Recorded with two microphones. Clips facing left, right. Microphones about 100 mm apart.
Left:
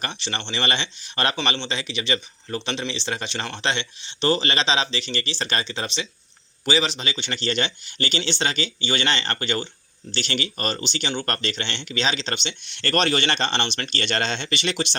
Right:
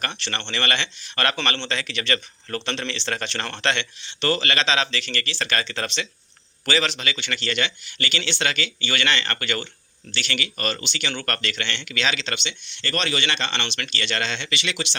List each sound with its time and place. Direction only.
0.0 s speech: 15° left (ahead or behind); by 12.5 s 40° left (ahead or behind)
12.6 s speech: 50° left (ahead or behind)